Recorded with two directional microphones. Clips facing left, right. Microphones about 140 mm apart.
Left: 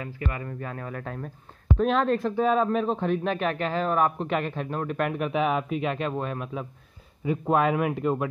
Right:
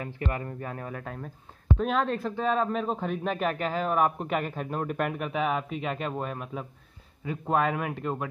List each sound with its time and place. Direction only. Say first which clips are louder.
0.4 s speech: left 1 dB; 20° right (ahead or behind)
1.0 s a man's voice: left 3 dB; 5° right (ahead or behind)